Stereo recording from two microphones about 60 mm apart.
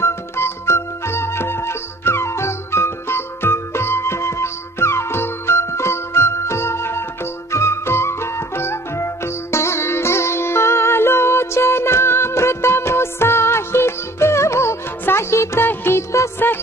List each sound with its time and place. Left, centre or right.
0.0 s music: left
15.6 s music: left